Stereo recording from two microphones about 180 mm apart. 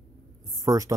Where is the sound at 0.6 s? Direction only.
20° right (ahead or behind).